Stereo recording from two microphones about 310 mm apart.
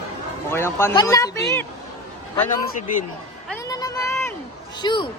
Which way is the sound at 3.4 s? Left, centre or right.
Centre.